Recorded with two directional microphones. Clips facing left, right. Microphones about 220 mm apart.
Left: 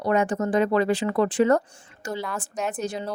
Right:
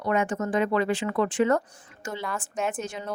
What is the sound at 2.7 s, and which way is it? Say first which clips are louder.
Speech: left 3 dB; 35° left (ahead or behind).